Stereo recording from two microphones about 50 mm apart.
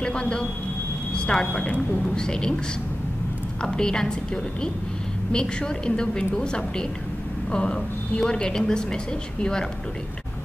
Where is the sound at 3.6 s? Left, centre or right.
Centre.